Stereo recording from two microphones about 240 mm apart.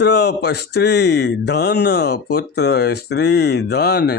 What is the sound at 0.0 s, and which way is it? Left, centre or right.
Speech, left.